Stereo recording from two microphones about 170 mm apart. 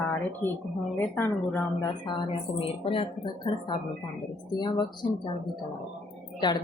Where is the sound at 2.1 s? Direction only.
30° left (ahead or behind).